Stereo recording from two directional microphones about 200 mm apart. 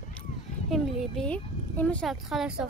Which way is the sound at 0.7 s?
Centre (ahead or behind).